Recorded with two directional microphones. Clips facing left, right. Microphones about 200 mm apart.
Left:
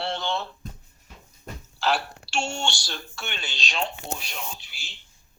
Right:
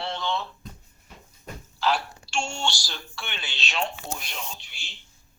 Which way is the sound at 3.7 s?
30° left (ahead or behind).